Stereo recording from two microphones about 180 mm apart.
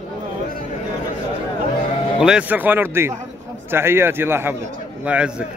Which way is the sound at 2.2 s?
5° right (ahead or behind).